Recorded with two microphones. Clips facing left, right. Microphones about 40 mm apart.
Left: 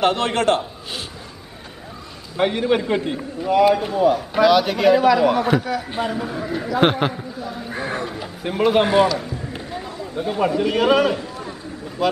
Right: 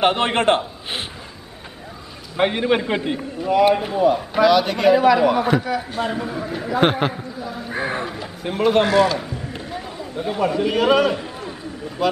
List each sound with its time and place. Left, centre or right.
0.0 s a man's voice: right
2.3 s a man's voice: right
3.2 s a man's voice: centre
7.7 s a sound: centre
8.2 s a man's voice: centre
9.2 s a sound: centre
10.5 s a man's voice: centre